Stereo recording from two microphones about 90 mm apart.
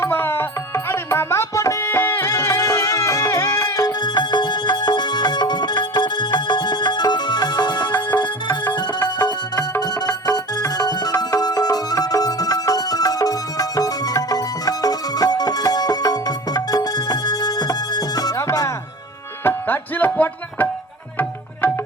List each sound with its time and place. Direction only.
0.0 s music: 25° left (ahead or behind)
2.2 s music: 40° left (ahead or behind)
4.0 s music: 55° left (ahead or behind)
9.8 s music: 40° left (ahead or behind)
19.5 s music: 20° left (ahead or behind)